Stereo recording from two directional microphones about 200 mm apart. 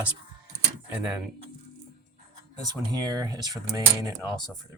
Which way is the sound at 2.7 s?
20° right (ahead or behind).